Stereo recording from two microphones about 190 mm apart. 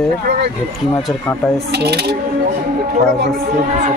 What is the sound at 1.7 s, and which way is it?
Speech, 60° right (ahead or behind).